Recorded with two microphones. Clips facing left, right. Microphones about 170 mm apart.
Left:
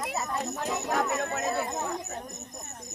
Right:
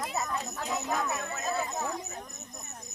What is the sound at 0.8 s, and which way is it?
Speech, 65° left (ahead or behind).